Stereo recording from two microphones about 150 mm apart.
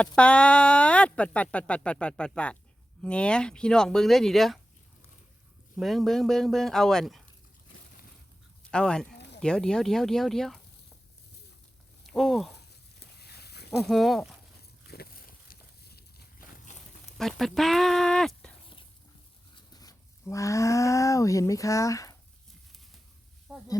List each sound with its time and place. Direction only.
0.0 s speech: 10° left (ahead or behind)
5.7 s speech: centre (ahead or behind)
8.7 s speech: 5° left (ahead or behind)
12.0 s speech: centre (ahead or behind)
13.0 s vehicle: 90° left
13.7 s speech: centre (ahead or behind)
14.8 s a sound: 80° left
16.7 s a sound: 55° left (ahead or behind)
17.2 s speech: centre (ahead or behind)
19.5 s speech: 25° left (ahead or behind)
23.5 s a sound: 5° right (ahead or behind)